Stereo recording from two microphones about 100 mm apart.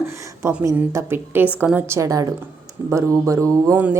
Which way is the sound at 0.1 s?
30° right (ahead or behind).